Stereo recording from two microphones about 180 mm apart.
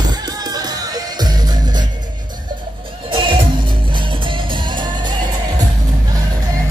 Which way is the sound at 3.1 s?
30° right (ahead or behind).